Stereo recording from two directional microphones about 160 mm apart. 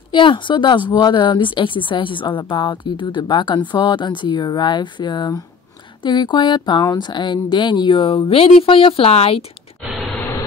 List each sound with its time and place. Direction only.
0.1 s speech: 30° left (ahead or behind)